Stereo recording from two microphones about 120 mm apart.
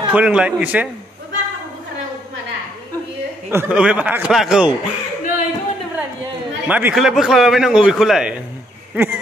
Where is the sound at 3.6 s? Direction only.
10° right (ahead or behind).